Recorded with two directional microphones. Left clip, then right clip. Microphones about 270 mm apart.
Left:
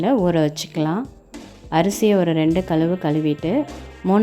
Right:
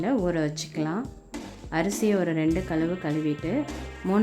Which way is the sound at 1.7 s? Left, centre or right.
Centre.